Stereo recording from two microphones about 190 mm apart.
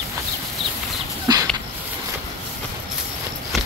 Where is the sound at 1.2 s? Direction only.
20° right (ahead or behind).